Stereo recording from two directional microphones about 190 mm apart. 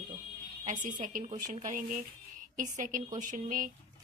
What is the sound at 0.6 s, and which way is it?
Speech, 40° right (ahead or behind).